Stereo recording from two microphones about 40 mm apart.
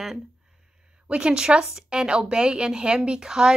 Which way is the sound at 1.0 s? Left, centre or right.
Right.